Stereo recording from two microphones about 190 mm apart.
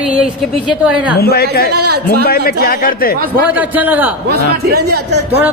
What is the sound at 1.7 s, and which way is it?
Speech, 55° right (ahead or behind).